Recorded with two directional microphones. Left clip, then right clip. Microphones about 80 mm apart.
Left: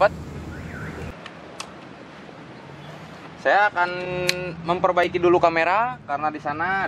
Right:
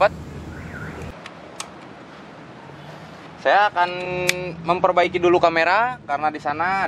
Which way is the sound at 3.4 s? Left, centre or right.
Centre.